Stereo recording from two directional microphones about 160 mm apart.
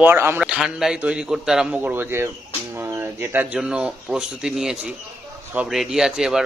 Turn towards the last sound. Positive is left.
turn(degrees=-5)  # may be behind; listen again after turning